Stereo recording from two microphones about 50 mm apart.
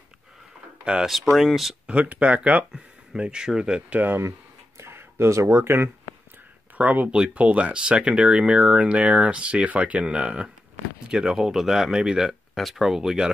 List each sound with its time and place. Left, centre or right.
1.0 s speech: centre
1.9 s speech: right
2.7 s speech: centre
3.9 s speech: right
4.7 s a sound: right
6.8 s speech: right
7.1 s speech: right
12.3 s speech: centre